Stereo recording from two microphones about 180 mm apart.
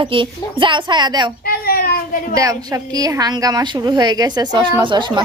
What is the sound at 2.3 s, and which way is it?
A woman's voice, 20° right (ahead or behind).